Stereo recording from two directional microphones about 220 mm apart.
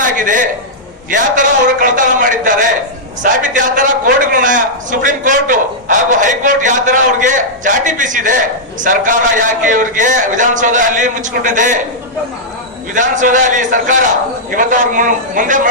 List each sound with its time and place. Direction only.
0.0 s a sound: 35° right (ahead or behind)
1.1 s a man's voice: 35° right (ahead or behind)
12.9 s a man's voice: 35° right (ahead or behind)